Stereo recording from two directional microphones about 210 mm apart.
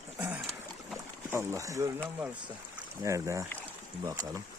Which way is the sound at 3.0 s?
15° right (ahead or behind).